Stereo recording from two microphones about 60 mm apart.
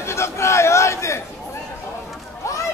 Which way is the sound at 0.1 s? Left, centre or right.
Left.